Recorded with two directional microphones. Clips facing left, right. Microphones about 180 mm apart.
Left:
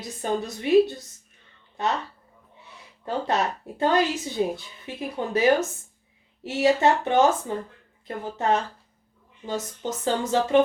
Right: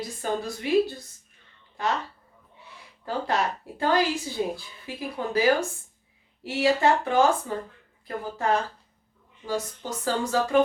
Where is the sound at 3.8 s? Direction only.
20° left (ahead or behind).